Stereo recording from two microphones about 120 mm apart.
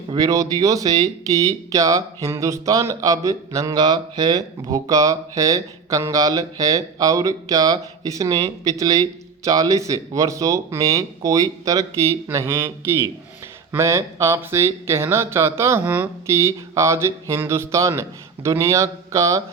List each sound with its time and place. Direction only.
0.1 s speech: 30° right (ahead or behind)